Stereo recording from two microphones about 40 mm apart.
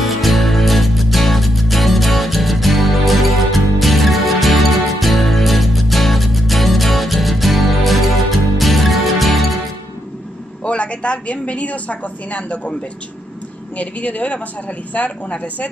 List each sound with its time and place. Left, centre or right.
0.0 s music: centre
10.6 s a woman's voice: left
13.7 s speech: left